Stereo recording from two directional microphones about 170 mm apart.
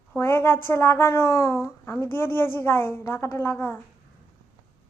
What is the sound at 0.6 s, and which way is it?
A woman's voice, 15° left (ahead or behind).